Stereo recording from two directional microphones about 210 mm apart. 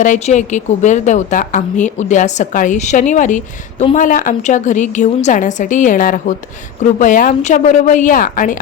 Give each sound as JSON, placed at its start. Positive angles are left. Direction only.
{"t": 0.0, "sound": "a woman's voice", "side_deg": 35}